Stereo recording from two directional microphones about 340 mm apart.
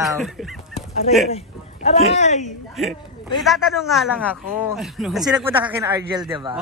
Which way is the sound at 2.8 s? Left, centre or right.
Centre.